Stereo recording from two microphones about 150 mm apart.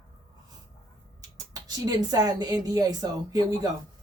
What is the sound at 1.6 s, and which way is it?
Speech, 25° right (ahead or behind).